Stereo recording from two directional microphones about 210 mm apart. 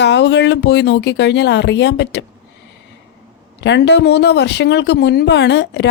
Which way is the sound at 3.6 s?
55° left (ahead or behind).